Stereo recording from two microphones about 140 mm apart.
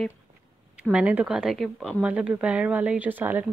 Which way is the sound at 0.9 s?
10° right (ahead or behind).